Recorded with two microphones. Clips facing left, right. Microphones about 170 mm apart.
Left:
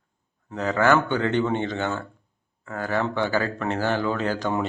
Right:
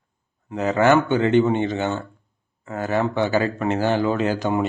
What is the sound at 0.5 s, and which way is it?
A man's voice, 20° right (ahead or behind).